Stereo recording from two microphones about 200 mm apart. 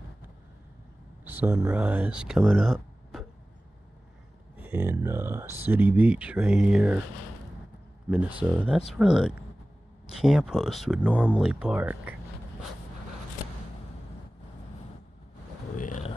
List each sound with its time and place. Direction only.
1.2 s speech: 10° right (ahead or behind)
4.6 s speech: 10° right (ahead or behind)
8.1 s speech: 5° right (ahead or behind)
15.7 s a sound: 40° left (ahead or behind)